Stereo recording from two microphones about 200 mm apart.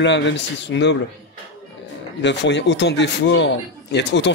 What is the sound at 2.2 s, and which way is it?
Speech, 60° left (ahead or behind).